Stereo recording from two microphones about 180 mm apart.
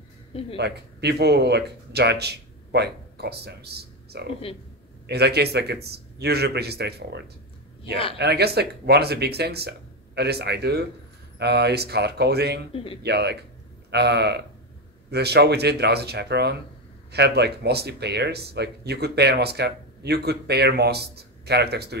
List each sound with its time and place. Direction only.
0.6 s speech: 65° right (ahead or behind)
8.2 s speech: 65° right (ahead or behind)
12.7 s speech: 30° left (ahead or behind)
13.0 s speech: 65° right (ahead or behind)